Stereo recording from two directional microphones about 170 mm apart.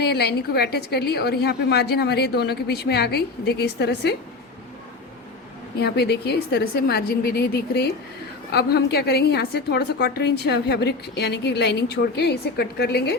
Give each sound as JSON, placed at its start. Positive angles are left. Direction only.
{"t": 0.0, "sound": "a woman's voice", "side_deg": 75}
{"t": 5.8, "sound": "a woman's voice", "side_deg": 75}